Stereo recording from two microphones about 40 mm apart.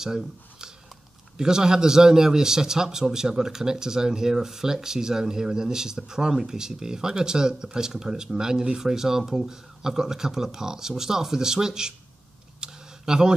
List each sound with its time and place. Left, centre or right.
0.0 s a man's voice: centre
12.5 s camera: centre